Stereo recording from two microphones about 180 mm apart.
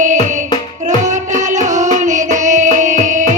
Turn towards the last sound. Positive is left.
turn(degrees=-45)  # may be behind; listen again after turning